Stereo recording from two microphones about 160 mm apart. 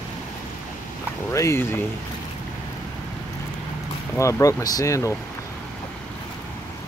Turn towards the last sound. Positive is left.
turn(degrees=20)  # may be behind; listen again after turning